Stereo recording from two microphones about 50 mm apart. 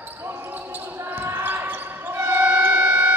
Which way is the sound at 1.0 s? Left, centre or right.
Right.